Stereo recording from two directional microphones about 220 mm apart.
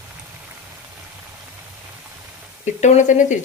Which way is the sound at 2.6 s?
35° left (ahead or behind).